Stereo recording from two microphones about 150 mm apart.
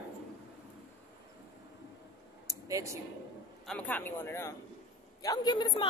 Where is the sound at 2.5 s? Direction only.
20° right (ahead or behind).